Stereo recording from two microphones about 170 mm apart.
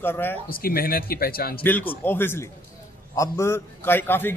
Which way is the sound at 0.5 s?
60° left (ahead or behind).